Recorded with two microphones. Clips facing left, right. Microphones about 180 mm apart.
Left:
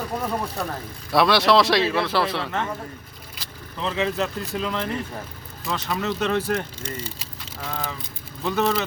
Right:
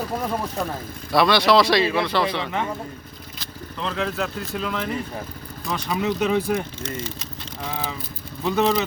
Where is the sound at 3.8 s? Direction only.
Centre (ahead or behind).